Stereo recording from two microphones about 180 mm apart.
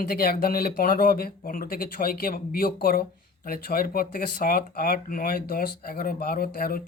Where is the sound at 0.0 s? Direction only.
55° left (ahead or behind).